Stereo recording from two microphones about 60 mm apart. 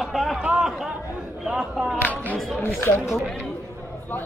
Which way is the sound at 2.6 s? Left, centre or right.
Left.